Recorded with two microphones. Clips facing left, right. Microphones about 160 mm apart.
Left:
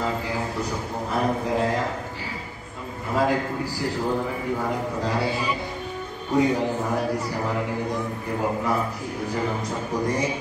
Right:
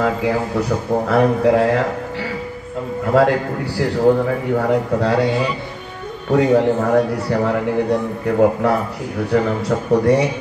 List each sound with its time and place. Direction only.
1.0 s a man's voice: 75° right (ahead or behind)
3.2 s a man's voice: 70° right (ahead or behind)
6.3 s a man's voice: 70° right (ahead or behind)